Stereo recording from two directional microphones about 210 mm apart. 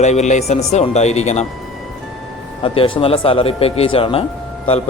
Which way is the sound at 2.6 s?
25° left (ahead or behind).